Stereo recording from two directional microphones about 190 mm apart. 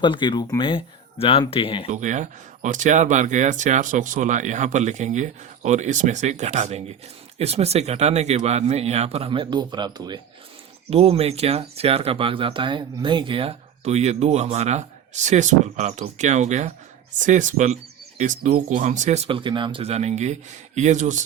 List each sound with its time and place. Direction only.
0.0 s speech: 25° left (ahead or behind)
1.9 s speech: 40° right (ahead or behind)